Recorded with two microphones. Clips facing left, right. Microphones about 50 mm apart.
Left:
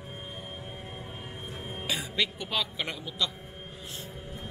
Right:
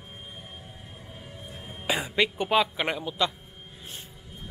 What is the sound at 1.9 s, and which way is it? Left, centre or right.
Speech, right.